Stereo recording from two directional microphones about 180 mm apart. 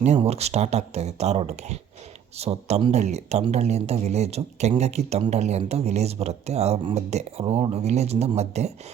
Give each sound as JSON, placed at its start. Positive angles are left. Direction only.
{"t": 0.0, "sound": "speech", "side_deg": -35}